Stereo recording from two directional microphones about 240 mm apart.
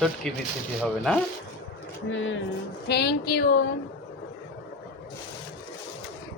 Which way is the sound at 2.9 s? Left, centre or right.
Left.